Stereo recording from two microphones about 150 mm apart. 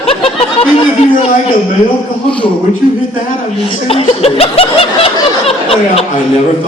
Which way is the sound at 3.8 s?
40° left (ahead or behind).